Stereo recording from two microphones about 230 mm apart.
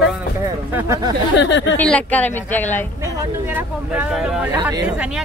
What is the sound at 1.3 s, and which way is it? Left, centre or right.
Speech, left.